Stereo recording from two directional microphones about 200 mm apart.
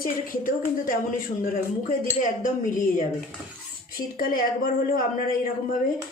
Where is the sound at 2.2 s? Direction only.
40° left (ahead or behind).